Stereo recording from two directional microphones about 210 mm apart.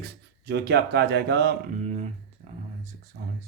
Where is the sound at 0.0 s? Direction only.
50° right (ahead or behind).